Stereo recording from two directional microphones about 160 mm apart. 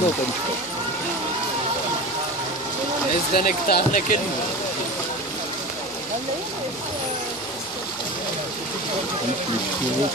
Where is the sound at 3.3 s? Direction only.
65° left (ahead or behind).